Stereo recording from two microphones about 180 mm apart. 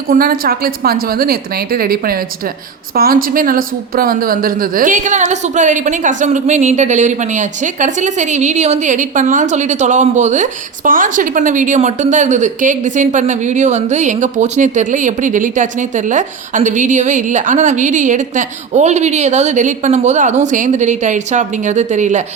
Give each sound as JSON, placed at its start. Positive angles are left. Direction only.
{"t": 0.1, "sound": "a woman's voice", "side_deg": -55}